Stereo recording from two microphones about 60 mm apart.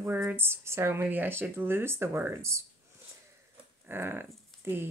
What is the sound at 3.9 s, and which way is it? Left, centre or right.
Speech, right.